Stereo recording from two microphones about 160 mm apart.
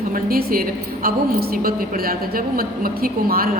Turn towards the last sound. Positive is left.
turn(degrees=-65)  # may be behind; listen again after turning